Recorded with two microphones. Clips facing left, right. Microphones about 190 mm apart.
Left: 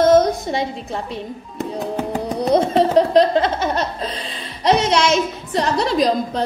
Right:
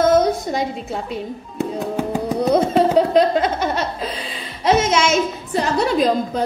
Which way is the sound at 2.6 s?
5° right (ahead or behind).